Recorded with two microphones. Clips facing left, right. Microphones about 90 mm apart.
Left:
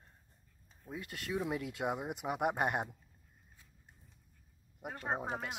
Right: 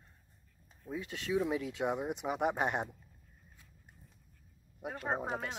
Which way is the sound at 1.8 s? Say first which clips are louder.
Right 2 dB; 5° left (ahead or behind).